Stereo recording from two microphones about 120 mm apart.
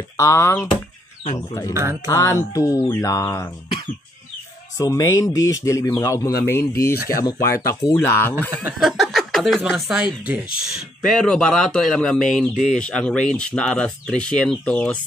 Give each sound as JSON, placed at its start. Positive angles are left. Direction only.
{"t": 0.2, "sound": "speech", "side_deg": 20}
{"t": 1.7, "sound": "speech", "side_deg": -20}
{"t": 2.0, "sound": "speech", "side_deg": 30}
{"t": 4.7, "sound": "speech", "side_deg": 30}
{"t": 8.7, "sound": "speech", "side_deg": 0}
{"t": 11.1, "sound": "speech", "side_deg": 5}